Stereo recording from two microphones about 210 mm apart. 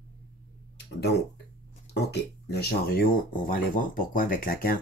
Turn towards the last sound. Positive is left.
turn(degrees=45)  # may be behind; listen again after turning